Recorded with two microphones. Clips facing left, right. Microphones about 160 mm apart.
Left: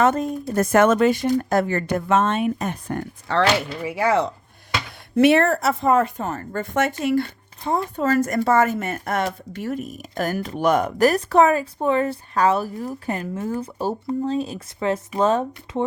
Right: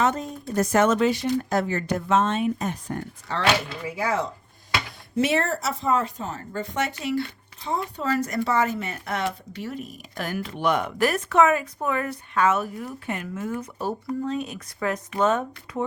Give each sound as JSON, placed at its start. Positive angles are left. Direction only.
{"t": 0.0, "sound": "speech", "side_deg": 55}